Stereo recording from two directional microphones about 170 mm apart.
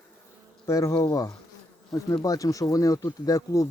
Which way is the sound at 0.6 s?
20° left (ahead or behind).